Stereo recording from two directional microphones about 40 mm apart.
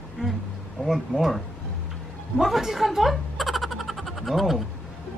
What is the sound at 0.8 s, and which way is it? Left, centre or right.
Speech, centre.